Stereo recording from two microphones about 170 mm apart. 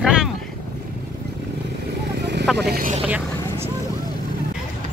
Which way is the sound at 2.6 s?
65° right (ahead or behind).